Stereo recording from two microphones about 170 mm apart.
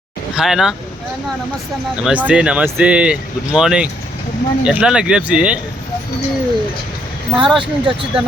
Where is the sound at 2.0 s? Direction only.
5° right (ahead or behind).